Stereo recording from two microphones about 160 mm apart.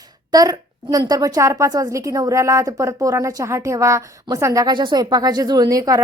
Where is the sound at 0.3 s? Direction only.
25° right (ahead or behind).